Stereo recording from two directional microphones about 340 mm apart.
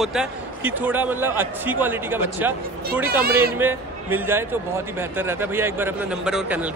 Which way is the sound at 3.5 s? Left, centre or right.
Centre.